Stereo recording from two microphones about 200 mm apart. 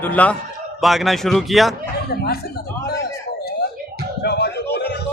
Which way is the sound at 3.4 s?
50° left (ahead or behind).